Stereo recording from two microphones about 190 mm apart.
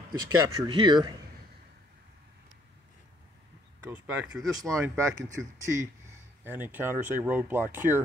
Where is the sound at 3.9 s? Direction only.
10° right (ahead or behind).